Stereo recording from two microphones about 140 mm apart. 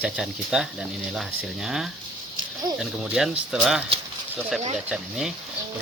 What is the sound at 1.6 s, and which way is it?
Speech, 5° right (ahead or behind).